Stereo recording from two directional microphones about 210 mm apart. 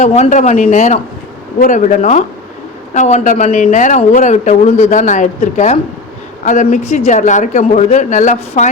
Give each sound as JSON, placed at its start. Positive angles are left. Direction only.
{"t": 0.0, "sound": "a woman's voice", "side_deg": 30}